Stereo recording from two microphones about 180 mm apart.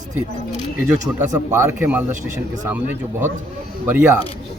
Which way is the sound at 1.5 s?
15° right (ahead or behind).